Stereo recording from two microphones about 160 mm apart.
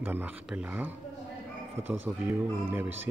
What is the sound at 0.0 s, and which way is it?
Speech, 10° right (ahead or behind).